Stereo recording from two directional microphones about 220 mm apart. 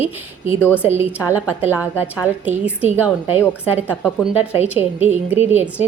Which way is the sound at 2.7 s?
5° right (ahead or behind).